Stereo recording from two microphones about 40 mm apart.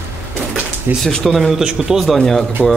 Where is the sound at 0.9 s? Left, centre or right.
Right.